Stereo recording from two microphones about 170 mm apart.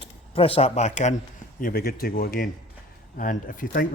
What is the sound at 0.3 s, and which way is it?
Speech, 35° left (ahead or behind).